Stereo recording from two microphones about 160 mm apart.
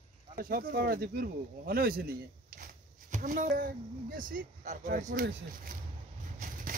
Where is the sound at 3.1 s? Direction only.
55° right (ahead or behind).